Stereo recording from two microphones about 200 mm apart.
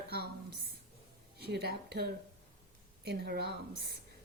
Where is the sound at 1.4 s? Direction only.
55° right (ahead or behind).